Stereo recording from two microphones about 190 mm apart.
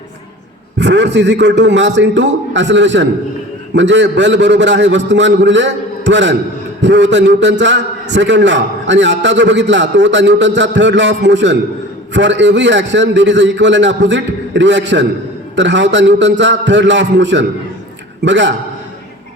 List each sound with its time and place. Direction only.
0.8 s a man's voice: 65° right (ahead or behind)